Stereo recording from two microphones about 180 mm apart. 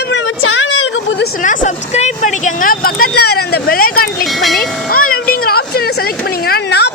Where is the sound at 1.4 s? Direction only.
45° left (ahead or behind).